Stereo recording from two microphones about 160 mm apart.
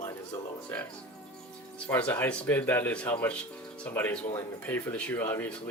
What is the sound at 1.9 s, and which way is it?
Speech, 10° left (ahead or behind).